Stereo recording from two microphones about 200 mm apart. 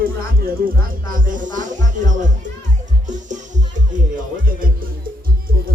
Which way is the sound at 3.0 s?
40° right (ahead or behind).